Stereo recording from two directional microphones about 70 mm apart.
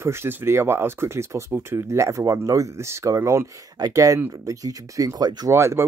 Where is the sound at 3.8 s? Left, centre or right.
Right.